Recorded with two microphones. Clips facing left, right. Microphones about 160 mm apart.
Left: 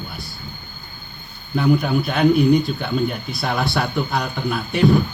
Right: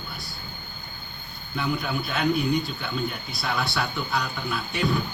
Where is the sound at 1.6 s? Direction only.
55° left (ahead or behind).